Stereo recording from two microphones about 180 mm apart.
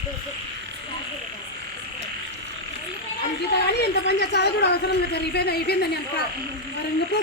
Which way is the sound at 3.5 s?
65° left (ahead or behind).